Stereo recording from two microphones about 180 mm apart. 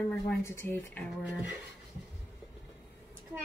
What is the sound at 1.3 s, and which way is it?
Dishes, 10° right (ahead or behind).